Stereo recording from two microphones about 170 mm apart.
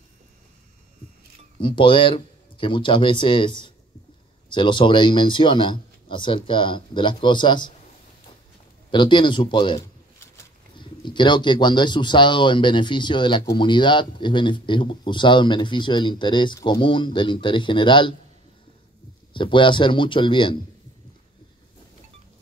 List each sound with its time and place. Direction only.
1.6 s speech: 30° left (ahead or behind)
8.9 s speech: 25° left (ahead or behind)
19.3 s speech: 30° left (ahead or behind)